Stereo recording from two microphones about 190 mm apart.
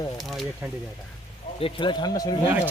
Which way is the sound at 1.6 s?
25° left (ahead or behind).